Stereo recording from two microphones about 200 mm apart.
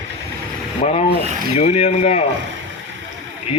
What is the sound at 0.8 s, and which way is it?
Speech, 35° left (ahead or behind).